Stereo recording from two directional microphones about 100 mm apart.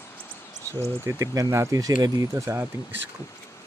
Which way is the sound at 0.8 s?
30° right (ahead or behind).